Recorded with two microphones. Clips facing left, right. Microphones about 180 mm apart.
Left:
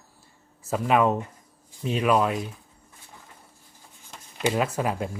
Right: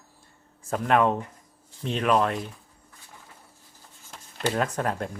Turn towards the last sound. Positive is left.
turn(degrees=5)  # may be behind; listen again after turning